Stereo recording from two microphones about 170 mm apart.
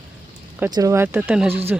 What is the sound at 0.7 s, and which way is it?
Speech, 20° right (ahead or behind).